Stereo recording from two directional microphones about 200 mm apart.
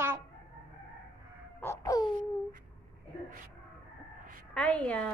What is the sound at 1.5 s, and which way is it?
Babbling, 15° left (ahead or behind).